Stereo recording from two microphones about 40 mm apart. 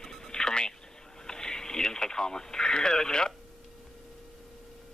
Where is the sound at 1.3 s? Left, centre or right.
Centre.